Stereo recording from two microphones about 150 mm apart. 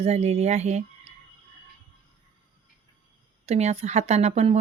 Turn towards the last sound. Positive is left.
turn(degrees=-45)  # may be behind; listen again after turning